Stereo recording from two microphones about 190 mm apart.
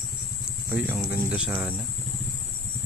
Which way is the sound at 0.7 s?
10° right (ahead or behind).